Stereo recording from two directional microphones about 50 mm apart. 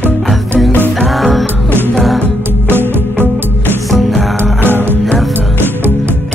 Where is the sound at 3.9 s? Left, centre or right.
Centre.